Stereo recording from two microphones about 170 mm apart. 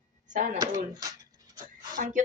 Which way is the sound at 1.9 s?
50° right (ahead or behind).